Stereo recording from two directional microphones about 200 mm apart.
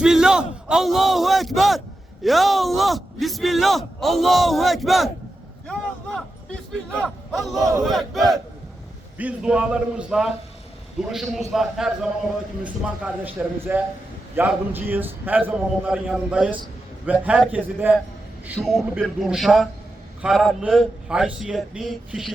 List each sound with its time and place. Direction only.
0.0 s speech: 5° right (ahead or behind)
7.0 s a man's voice: centre (ahead or behind)
7.6 s a man's voice: 15° right (ahead or behind)
7.9 s a man's voice: centre (ahead or behind)